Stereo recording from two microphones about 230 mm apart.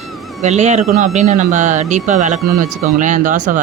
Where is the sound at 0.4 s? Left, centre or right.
Right.